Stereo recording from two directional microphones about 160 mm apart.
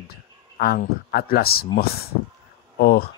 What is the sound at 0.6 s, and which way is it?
Speech, 75° left (ahead or behind).